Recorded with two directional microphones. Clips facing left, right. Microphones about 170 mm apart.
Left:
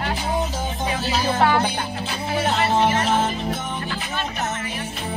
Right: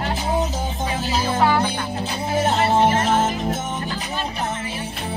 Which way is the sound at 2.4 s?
45° right (ahead or behind).